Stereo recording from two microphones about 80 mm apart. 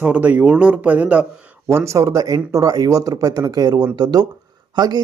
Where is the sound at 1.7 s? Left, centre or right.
Right.